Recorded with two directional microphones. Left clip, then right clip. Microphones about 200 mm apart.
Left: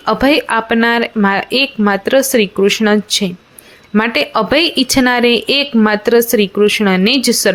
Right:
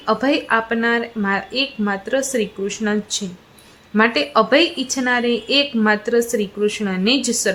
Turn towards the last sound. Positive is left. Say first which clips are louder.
# left 6 dB
turn(degrees=25)  # may be behind; listen again after turning